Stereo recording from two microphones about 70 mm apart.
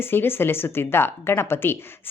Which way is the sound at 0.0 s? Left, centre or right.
Left.